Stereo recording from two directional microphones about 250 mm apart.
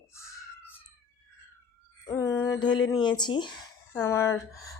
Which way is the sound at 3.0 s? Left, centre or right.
Centre.